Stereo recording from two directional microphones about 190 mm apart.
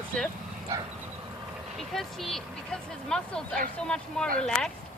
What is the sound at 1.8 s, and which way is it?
Speech, centre (ahead or behind).